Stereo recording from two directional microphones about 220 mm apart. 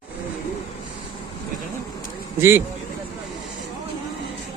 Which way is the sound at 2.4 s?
10° right (ahead or behind).